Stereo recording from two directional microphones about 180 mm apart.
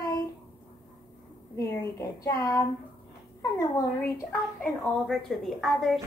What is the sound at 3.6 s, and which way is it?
Speech, 20° left (ahead or behind).